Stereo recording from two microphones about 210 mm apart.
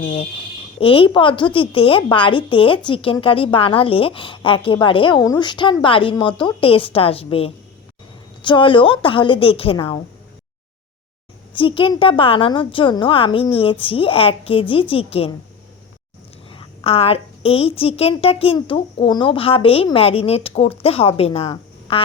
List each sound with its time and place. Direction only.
0.0 s a woman's voice: 25° left (ahead or behind)
11.5 s a woman's voice: 25° left (ahead or behind)
16.5 s a woman's voice: 25° left (ahead or behind)
21.4 s a sound: 25° left (ahead or behind)